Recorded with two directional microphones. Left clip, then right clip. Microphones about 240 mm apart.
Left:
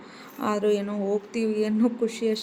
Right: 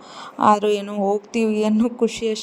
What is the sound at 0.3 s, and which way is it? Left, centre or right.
Speech, right.